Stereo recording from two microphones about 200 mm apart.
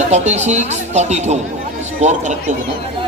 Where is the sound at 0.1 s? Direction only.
35° right (ahead or behind).